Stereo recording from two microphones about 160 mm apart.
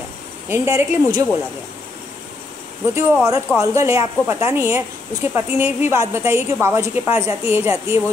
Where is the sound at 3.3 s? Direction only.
20° right (ahead or behind).